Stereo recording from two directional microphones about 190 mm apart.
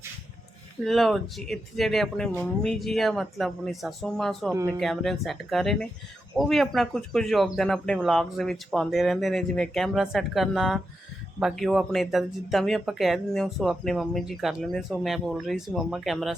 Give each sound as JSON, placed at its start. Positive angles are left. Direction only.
{"t": 0.9, "sound": "speech", "side_deg": 0}
{"t": 4.5, "sound": "speech", "side_deg": -15}
{"t": 4.8, "sound": "speech", "side_deg": 0}